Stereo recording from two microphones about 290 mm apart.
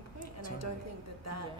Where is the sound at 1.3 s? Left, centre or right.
Right.